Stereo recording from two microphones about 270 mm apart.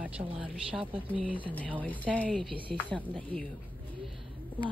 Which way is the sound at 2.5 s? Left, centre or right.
Centre.